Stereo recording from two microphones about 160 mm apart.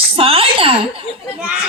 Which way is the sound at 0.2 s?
35° right (ahead or behind).